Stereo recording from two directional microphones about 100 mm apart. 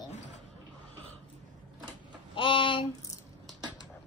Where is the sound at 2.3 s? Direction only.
60° left (ahead or behind).